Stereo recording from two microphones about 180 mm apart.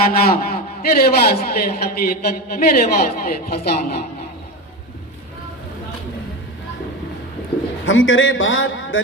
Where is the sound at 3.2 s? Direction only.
60° left (ahead or behind).